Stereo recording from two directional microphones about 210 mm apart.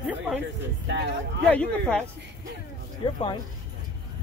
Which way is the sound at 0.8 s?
55° right (ahead or behind).